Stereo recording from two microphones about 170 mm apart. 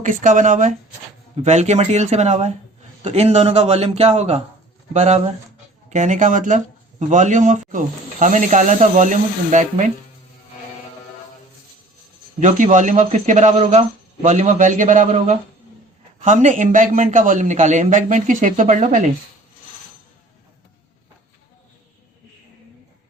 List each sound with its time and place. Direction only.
0.0 s a man's voice: 50° right (ahead or behind)
12.4 s speech: 45° right (ahead or behind)